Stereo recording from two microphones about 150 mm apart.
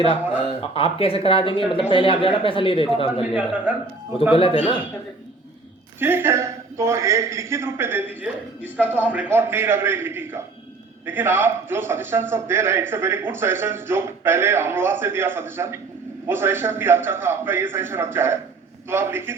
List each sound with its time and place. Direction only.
0.6 s speech: 40° left (ahead or behind)
3.3 s a man's voice: 10° right (ahead or behind)
4.2 s speech: 35° left (ahead or behind)
6.0 s a man's voice: 15° right (ahead or behind)
8.8 s a man's voice: 10° left (ahead or behind)
9.0 s a man's voice: 10° right (ahead or behind)